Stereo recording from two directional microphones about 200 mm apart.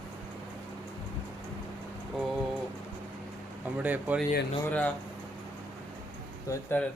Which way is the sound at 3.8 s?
10° right (ahead or behind).